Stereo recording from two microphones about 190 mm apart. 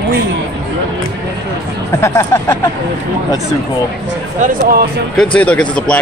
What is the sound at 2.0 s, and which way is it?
Speech, 15° left (ahead or behind).